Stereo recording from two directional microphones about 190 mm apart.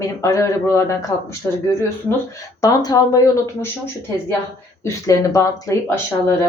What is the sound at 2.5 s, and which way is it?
Speech, 20° left (ahead or behind).